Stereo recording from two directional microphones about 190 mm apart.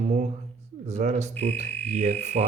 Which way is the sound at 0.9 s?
35° right (ahead or behind).